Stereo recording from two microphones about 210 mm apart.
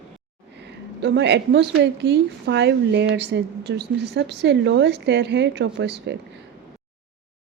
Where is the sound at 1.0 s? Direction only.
55° right (ahead or behind).